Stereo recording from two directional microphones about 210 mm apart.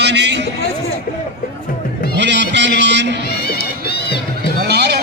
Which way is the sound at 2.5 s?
55° right (ahead or behind).